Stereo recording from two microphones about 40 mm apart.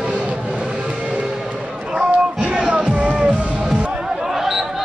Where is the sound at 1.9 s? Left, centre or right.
Right.